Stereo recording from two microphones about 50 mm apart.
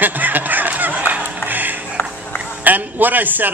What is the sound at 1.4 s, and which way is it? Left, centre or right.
Music, right.